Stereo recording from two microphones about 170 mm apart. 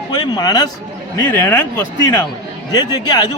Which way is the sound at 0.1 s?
25° left (ahead or behind).